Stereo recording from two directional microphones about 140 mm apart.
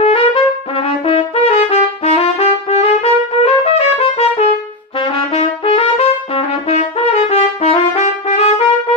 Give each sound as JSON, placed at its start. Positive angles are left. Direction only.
{"t": 0.0, "sound": "brass instrument", "side_deg": 45}